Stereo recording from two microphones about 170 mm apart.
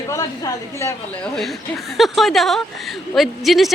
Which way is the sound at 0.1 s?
20° left (ahead or behind).